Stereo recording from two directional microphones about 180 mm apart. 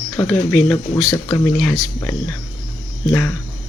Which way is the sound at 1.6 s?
Centre (ahead or behind).